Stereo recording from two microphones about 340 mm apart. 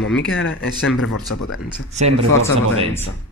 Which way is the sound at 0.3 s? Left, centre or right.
Left.